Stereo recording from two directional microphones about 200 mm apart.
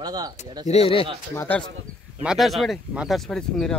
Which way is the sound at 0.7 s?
30° left (ahead or behind).